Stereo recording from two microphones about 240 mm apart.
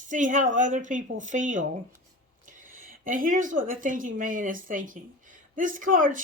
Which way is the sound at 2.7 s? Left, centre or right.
Right.